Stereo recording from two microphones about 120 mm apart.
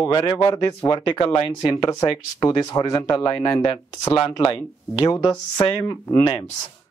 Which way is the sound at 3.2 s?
20° left (ahead or behind).